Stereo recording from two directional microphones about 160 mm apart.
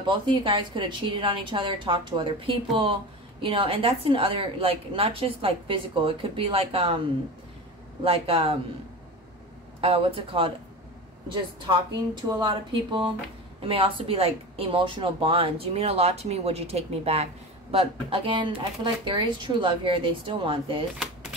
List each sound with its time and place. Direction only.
0.0 s a woman's voice: 30° right (ahead or behind)
8.0 s a woman's voice: 35° right (ahead or behind)
9.8 s a woman's voice: 40° right (ahead or behind)
12.3 s a woman's voice: 30° right (ahead or behind)
21.0 s typewriter: centre (ahead or behind)